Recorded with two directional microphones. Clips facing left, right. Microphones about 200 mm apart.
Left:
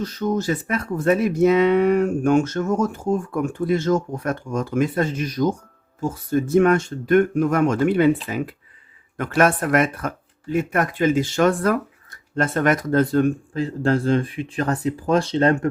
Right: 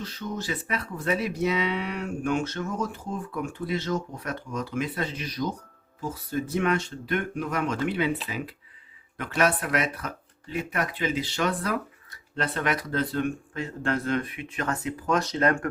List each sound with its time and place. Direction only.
0.0 s speech: 45° left (ahead or behind); by 15.7 s 25° left (ahead or behind)